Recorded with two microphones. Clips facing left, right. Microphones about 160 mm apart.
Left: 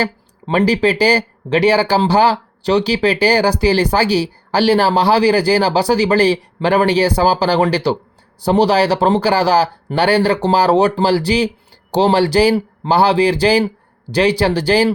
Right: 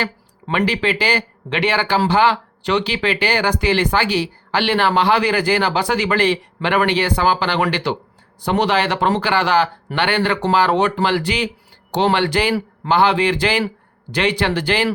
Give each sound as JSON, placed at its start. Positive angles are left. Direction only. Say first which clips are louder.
{"t": 0.4, "sound": "speech", "louder": "left 5 dB", "side_deg": 35}